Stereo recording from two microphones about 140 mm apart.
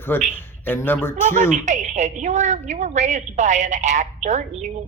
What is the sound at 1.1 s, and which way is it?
A woman's voice, 65° right (ahead or behind).